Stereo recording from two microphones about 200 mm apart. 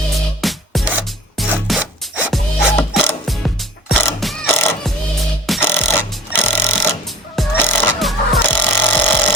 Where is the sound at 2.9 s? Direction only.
Centre (ahead or behind).